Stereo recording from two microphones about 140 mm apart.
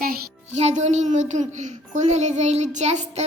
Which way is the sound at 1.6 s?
60° right (ahead or behind).